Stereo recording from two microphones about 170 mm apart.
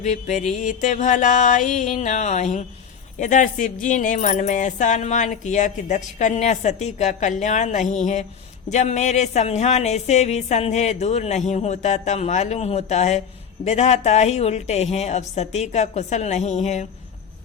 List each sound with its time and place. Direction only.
0.0 s a woman's voice: 45° left (ahead or behind)